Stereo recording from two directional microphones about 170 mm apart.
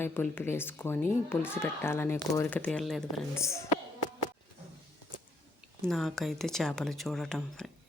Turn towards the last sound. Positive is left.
turn(degrees=5)  # may be behind; listen again after turning